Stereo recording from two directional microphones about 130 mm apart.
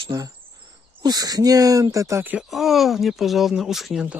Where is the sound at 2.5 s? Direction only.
Centre (ahead or behind).